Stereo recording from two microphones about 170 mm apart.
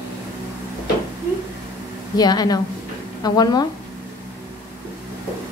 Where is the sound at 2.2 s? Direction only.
25° left (ahead or behind).